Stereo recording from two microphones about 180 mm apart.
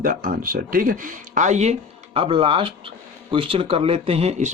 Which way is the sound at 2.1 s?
30° right (ahead or behind).